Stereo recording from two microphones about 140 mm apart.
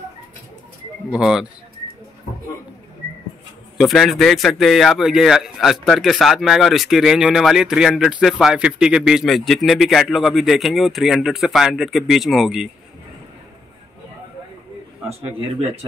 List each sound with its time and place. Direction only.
1.1 s speech: 5° right (ahead or behind)
3.7 s speech: centre (ahead or behind)